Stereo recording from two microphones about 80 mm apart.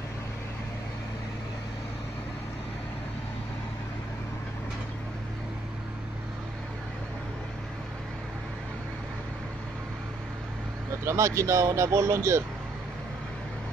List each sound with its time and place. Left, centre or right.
11.1 s speech: right